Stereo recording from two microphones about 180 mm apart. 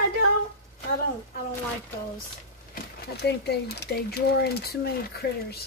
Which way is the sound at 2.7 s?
65° left (ahead or behind).